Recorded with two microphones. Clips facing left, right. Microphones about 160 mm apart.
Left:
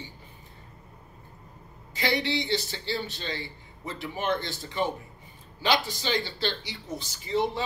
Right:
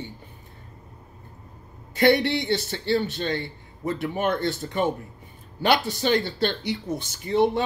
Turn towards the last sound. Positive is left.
turn(degrees=-60)  # may be behind; listen again after turning